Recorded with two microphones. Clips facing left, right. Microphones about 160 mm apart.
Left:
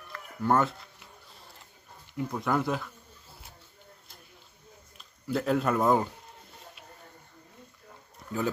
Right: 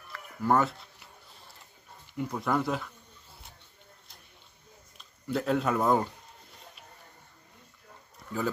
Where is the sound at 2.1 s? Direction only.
Centre (ahead or behind).